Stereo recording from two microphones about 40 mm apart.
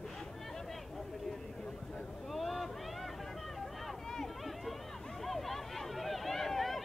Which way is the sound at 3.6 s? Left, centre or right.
Centre.